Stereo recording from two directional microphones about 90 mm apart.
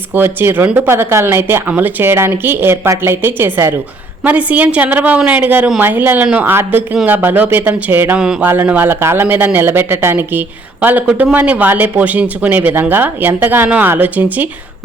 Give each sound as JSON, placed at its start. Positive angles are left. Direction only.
{"t": 0.1, "sound": "a woman's voice", "side_deg": -20}
{"t": 8.2, "sound": "a woman's voice", "side_deg": -10}
{"t": 8.4, "sound": "speech", "side_deg": -20}